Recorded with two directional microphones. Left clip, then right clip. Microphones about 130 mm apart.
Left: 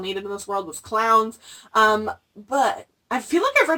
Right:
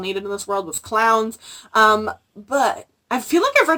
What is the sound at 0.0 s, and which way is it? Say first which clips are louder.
A woman's voice: right 3 dB; 5° right (ahead or behind).